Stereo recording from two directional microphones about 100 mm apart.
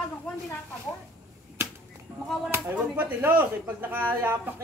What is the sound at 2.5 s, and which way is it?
Speech, 20° right (ahead or behind).